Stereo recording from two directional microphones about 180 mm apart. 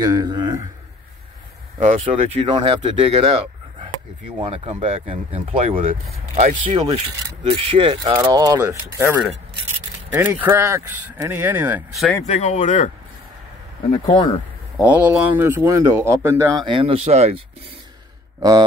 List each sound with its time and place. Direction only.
0.0 s speech: 20° right (ahead or behind)
1.8 s speech: 35° right (ahead or behind)
4.4 s speech: 30° right (ahead or behind); by 12.0 s 10° right (ahead or behind)
12.3 s speech: 40° left (ahead or behind)
14.0 s speech: 30° left (ahead or behind)
14.8 s speech: 5° right (ahead or behind)
16.6 s speech: 30° right (ahead or behind)